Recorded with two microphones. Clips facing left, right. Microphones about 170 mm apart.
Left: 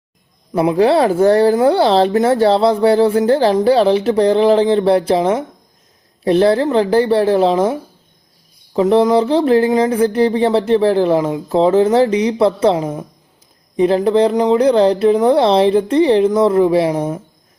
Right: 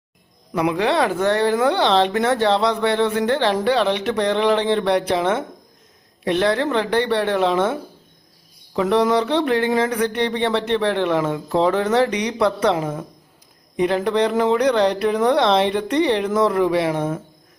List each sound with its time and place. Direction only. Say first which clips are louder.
0.5 s speech: left 7 dB; 35° left (ahead or behind)